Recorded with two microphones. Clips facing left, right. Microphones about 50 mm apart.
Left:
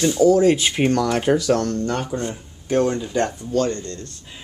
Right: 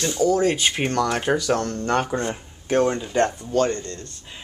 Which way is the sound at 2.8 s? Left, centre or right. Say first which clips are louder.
Right 1 dB; centre.